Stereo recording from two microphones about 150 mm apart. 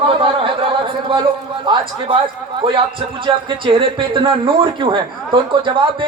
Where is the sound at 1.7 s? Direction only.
35° right (ahead or behind).